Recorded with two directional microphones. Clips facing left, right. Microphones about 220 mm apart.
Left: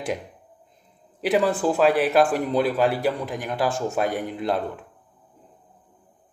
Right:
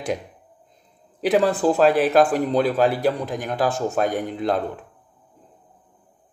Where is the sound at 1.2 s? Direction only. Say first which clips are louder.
Right 3 dB; 5° left (ahead or behind).